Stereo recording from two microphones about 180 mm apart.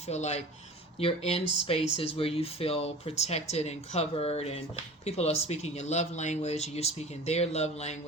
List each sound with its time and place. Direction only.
0.1 s speech: 40° left (ahead or behind)